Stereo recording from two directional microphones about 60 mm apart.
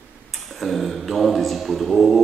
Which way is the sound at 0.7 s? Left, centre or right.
Centre.